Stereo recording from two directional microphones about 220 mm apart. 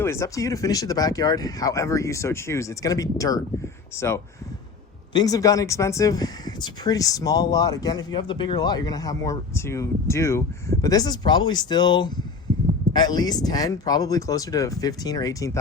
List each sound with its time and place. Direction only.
0.0 s speech: 10° left (ahead or behind)